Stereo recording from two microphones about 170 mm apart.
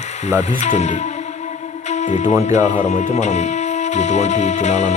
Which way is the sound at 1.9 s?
45° left (ahead or behind).